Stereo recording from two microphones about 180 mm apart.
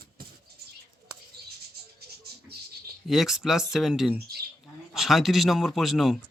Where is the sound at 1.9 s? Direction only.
60° right (ahead or behind).